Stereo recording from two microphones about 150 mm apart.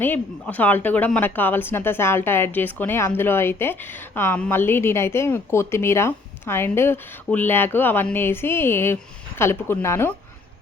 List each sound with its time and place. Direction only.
0.0 s speech: 10° left (ahead or behind)